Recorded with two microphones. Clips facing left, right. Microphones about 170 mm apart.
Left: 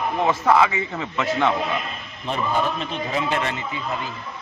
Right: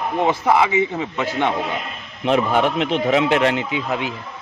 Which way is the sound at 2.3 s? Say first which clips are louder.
Right 6 dB; 85° right.